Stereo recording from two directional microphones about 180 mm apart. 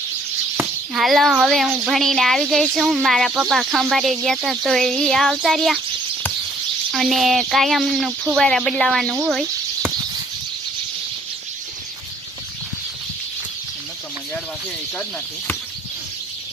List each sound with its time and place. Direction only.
0.9 s speech: centre (ahead or behind)
6.9 s speech: centre (ahead or behind)